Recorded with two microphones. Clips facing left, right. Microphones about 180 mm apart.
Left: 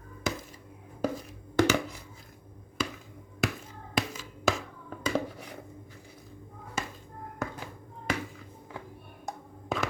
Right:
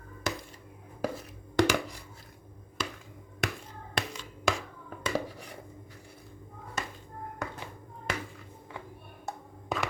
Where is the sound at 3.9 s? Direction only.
5° left (ahead or behind).